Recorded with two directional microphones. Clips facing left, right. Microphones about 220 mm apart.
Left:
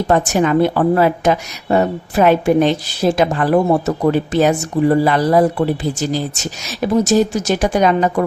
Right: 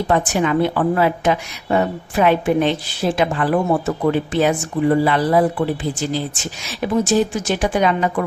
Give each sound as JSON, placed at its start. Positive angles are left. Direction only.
{"t": 0.1, "sound": "a woman's voice", "side_deg": 45}